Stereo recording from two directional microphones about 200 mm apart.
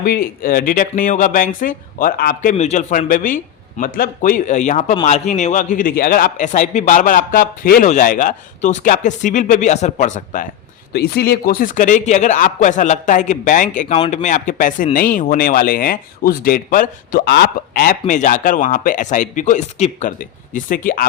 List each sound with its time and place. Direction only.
0.0 s a man's voice: 50° left (ahead or behind)
10.9 s a man's voice: 50° left (ahead or behind)